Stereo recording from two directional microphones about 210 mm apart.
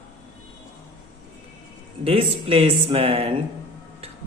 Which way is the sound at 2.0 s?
25° right (ahead or behind).